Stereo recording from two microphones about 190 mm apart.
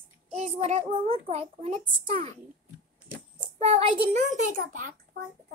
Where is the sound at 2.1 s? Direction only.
30° right (ahead or behind).